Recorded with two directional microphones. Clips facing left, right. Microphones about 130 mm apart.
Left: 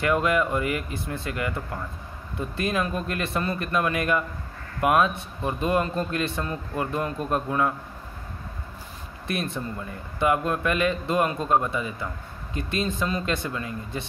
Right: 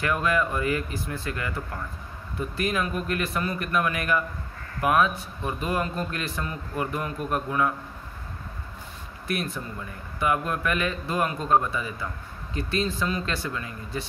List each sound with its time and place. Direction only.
0.0 s a man's voice: 20° left (ahead or behind)
9.3 s a man's voice: 25° left (ahead or behind)